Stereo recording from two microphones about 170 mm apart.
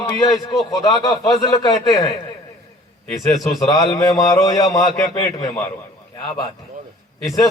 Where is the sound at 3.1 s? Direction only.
Centre (ahead or behind).